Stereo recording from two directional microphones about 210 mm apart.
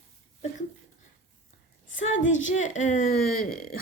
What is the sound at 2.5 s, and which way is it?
A woman's voice, 35° left (ahead or behind).